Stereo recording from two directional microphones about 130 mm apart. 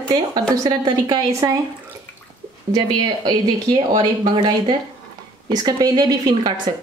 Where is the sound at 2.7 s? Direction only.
35° right (ahead or behind).